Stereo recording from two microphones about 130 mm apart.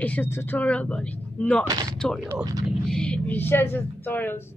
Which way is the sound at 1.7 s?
30° right (ahead or behind).